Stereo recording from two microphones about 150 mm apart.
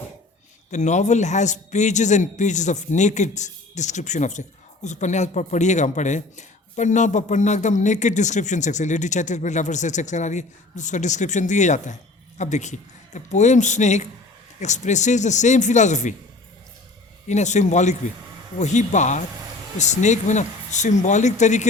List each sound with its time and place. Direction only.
0.7 s a man's voice: 50° left (ahead or behind)
17.2 s a man's voice: 50° left (ahead or behind)